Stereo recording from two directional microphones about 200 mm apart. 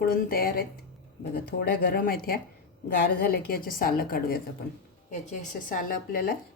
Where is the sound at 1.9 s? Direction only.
45° left (ahead or behind).